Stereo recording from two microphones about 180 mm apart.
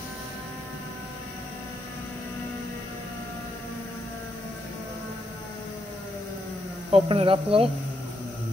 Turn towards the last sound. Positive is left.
turn(degrees=-30)  # may be behind; listen again after turning